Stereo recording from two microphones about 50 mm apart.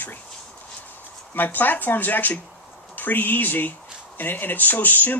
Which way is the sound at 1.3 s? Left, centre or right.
Left.